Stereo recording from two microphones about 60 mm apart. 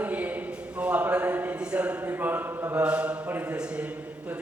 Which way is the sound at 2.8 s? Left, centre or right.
Centre.